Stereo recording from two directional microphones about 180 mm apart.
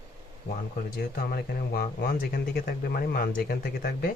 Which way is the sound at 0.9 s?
55° left (ahead or behind).